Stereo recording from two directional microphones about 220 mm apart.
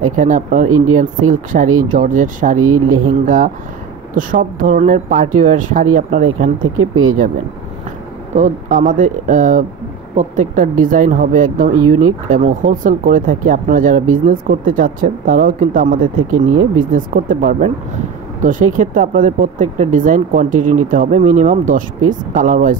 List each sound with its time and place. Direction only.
0.0 s speech: 35° right (ahead or behind)
2.6 s speech: 85° right
3.1 s speech: 35° right (ahead or behind)
6.6 s speech: 70° right (ahead or behind)
8.4 s speech: 35° right (ahead or behind)
16.2 s speech: 70° right (ahead or behind)
16.9 s speech: 40° right (ahead or behind)